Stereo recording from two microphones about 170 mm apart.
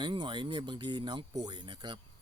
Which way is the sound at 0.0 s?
25° right (ahead or behind).